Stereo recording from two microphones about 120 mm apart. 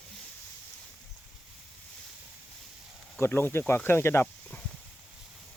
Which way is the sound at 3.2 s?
20° left (ahead or behind).